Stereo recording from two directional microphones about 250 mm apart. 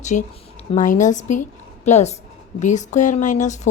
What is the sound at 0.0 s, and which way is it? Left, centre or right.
A woman's voice, left.